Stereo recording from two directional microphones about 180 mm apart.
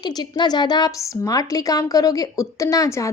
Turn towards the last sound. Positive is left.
turn(degrees=20)  # may be behind; listen again after turning